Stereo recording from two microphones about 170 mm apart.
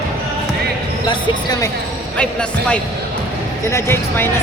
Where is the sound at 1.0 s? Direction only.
25° left (ahead or behind).